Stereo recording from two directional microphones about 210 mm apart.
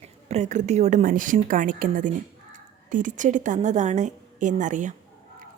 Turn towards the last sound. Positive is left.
turn(degrees=-35)  # may be behind; listen again after turning